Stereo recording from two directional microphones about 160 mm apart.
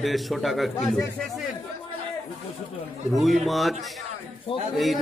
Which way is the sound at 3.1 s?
Centre (ahead or behind).